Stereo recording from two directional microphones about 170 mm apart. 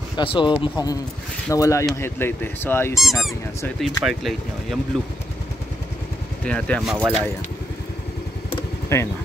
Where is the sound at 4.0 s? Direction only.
Centre (ahead or behind).